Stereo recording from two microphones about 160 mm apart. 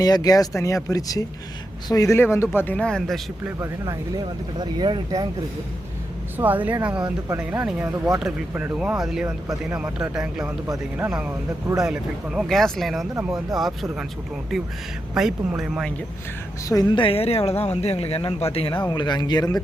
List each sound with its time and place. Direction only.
0.0 s speech: 25° left (ahead or behind); by 3.2 s 5° left (ahead or behind)
3.4 s speech: 20° right (ahead or behind)
6.3 s speech: 10° right (ahead or behind)
9.2 s speech: 20° right (ahead or behind)
9.7 s speech: 5° right (ahead or behind)
14.5 s speech: centre (ahead or behind)
16.6 s speech: 25° left (ahead or behind)